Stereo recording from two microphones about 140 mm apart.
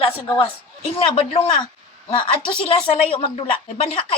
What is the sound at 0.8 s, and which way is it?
A woman's voice, 40° left (ahead or behind).